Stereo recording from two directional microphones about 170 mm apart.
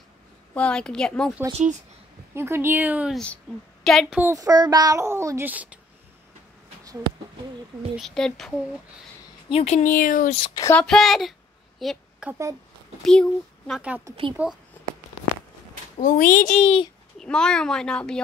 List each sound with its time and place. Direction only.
0.6 s a child's voice: 5° left (ahead or behind)
2.3 s a child's voice: 15° right (ahead or behind)
3.5 s a child's voice: centre (ahead or behind)
4.2 s a child's voice: 20° right (ahead or behind)
7.9 s a child's voice: centre (ahead or behind)
9.5 s speech: 40° left (ahead or behind)
9.9 s a child's voice: 50° left (ahead or behind)
10.3 s speech: 30° left (ahead or behind)
10.6 s a child's voice: 10° left (ahead or behind)
11.8 s a sound: centre (ahead or behind)
12.3 s a child's voice: 20° right (ahead or behind)
13.0 s a child's voice: 5° left (ahead or behind)
16.0 s a child's voice: 50° left (ahead or behind)
17.2 s a child's voice: 5° left (ahead or behind)